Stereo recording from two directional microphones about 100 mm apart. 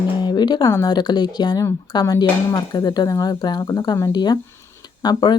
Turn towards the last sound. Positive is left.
turn(degrees=45)  # may be behind; listen again after turning